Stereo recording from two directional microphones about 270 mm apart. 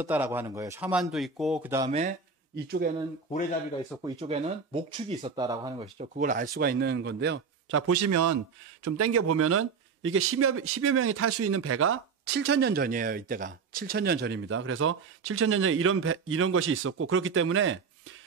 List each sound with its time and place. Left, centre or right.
0.0 s speech: centre
1.9 s speech: right
2.5 s a man's voice: right
4.0 s speech: right
5.9 s a man's voice: right
7.8 s a man's voice: right
8.8 s speech: right